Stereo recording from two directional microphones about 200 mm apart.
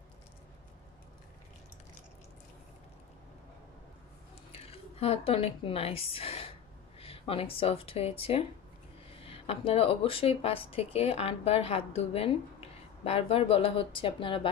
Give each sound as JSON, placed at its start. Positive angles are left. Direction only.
{"t": 4.5, "sound": "speech", "side_deg": 30}